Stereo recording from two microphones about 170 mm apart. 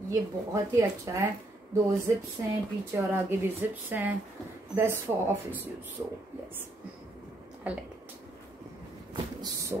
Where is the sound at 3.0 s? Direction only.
10° right (ahead or behind).